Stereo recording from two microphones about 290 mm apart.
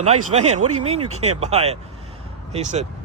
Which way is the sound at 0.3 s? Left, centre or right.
Right.